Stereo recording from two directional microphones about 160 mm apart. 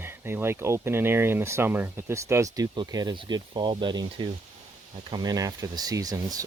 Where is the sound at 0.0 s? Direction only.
15° right (ahead or behind).